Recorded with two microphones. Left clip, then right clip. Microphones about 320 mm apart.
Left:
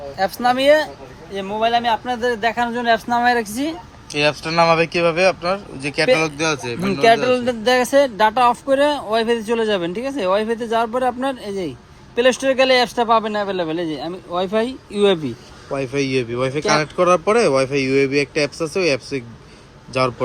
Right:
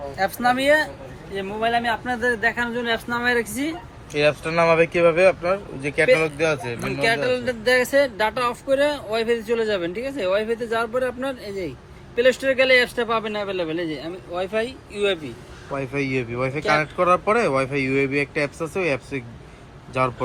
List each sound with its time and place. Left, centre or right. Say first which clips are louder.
0.2 s speech: left 3 dB; centre
4.1 s speech: left 2 dB; centre
7.0 s speech: left 7 dB; left
15.7 s speech: left 4 dB; centre